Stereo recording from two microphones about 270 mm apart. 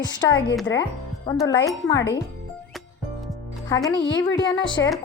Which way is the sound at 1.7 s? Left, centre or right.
Centre.